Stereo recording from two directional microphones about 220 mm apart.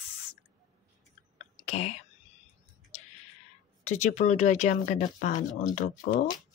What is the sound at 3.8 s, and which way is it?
Speech, 30° left (ahead or behind).